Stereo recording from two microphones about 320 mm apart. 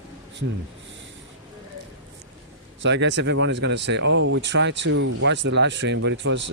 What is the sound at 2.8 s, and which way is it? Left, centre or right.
Speech, right.